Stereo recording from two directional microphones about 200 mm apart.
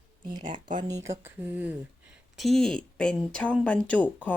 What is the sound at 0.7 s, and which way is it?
Speech, 15° right (ahead or behind).